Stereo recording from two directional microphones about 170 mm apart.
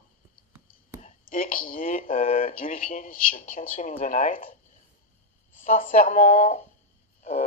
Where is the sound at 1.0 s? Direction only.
50° left (ahead or behind).